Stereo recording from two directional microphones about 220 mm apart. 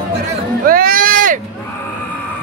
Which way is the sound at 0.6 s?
40° right (ahead or behind).